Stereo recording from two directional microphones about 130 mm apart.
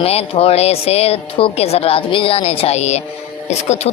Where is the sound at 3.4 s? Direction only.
60° left (ahead or behind).